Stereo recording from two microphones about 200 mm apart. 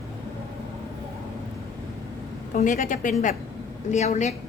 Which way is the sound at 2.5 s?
40° left (ahead or behind).